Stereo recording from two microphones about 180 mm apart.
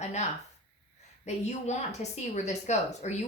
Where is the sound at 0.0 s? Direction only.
40° left (ahead or behind).